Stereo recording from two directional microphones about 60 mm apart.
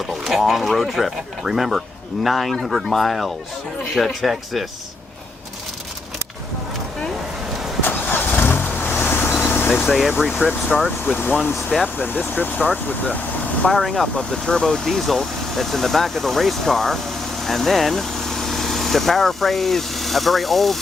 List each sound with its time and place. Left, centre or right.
0.3 s speech: centre
7.9 s vehicle: left
9.8 s speech: centre
10.4 s speech: left
13.7 s speech: centre
13.9 s speech: centre